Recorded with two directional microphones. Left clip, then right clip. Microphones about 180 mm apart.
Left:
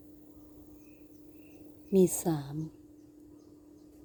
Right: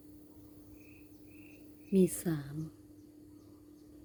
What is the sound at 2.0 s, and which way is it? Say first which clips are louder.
Speech: left 5 dB; 10° left (ahead or behind).